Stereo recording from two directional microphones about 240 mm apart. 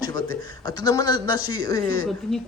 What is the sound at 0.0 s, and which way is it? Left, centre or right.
A man's voice, centre.